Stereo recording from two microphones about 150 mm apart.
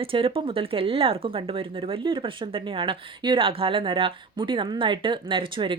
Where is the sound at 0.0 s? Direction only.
40° right (ahead or behind).